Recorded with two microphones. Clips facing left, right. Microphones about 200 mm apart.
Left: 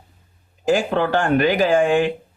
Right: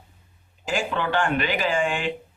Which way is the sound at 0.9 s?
45° left (ahead or behind).